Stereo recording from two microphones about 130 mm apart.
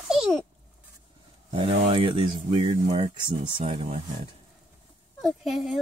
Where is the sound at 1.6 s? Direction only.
55° right (ahead or behind).